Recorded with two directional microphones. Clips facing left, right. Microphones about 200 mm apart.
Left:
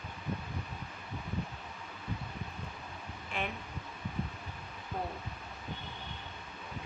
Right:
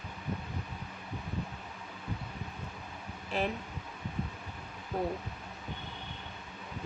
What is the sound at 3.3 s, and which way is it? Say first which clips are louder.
Speech: right 6 dB; 40° right (ahead or behind).